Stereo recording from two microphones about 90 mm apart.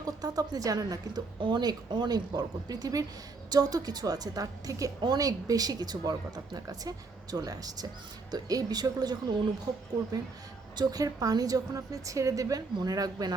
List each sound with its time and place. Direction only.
0.0 s a woman's voice: 45° right (ahead or behind)
1.4 s speech: 60° right (ahead or behind)
10.8 s speech: 45° right (ahead or behind)